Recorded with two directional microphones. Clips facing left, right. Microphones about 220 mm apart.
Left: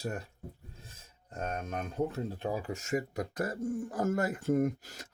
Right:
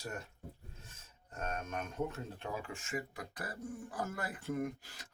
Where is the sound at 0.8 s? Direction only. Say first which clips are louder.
Left 4 dB; 35° left (ahead or behind).